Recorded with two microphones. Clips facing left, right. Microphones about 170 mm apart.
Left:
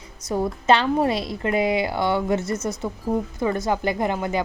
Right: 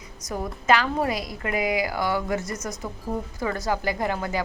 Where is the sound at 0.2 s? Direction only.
30° left (ahead or behind).